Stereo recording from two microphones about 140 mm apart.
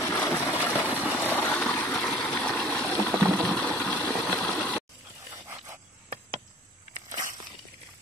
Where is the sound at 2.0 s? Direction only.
5° left (ahead or behind).